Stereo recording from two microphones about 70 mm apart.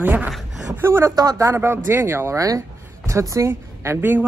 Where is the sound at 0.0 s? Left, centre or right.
Right.